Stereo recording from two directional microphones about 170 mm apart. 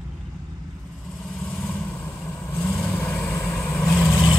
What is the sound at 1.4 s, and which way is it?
Vehicle, 10° left (ahead or behind).